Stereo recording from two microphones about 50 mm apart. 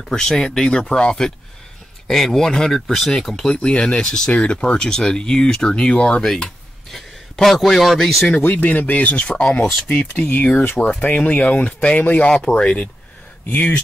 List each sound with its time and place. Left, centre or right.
0.0 s speech: centre
7.4 s a man's voice: centre
8.3 s speech: left
9.3 s a man's voice: centre
10.1 s speech: left
12.0 s speech: left